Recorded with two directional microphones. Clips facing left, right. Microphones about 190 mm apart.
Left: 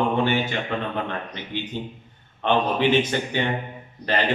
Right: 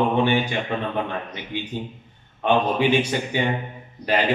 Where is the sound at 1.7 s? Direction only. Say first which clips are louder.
Right 1 dB; 15° right (ahead or behind).